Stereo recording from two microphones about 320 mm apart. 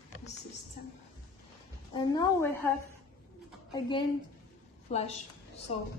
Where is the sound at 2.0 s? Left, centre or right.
Centre.